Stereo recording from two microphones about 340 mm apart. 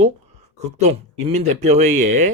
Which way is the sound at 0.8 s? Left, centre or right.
Centre.